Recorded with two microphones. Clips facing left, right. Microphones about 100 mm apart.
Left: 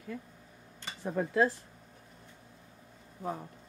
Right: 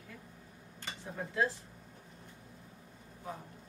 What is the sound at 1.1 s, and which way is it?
Speech, 55° left (ahead or behind).